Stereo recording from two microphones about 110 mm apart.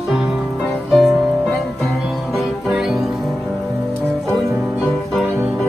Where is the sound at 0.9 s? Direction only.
Centre (ahead or behind).